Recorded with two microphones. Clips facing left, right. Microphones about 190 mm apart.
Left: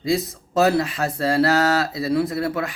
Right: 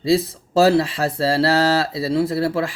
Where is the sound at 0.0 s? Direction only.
30° right (ahead or behind).